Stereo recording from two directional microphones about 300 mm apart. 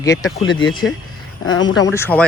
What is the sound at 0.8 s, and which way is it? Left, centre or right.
Speech, left.